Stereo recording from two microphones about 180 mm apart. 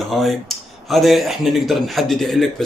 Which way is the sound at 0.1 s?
Centre (ahead or behind).